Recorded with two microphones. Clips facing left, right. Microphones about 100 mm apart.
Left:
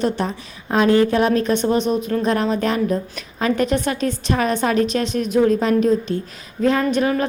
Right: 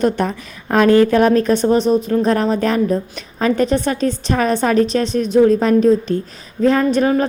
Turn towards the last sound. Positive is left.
turn(degrees=-35)  # may be behind; listen again after turning